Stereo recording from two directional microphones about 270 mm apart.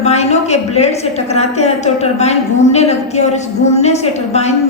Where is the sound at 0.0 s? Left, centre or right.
Left.